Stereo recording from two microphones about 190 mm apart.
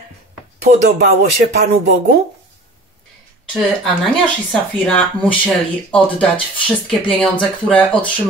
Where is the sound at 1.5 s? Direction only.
60° right (ahead or behind).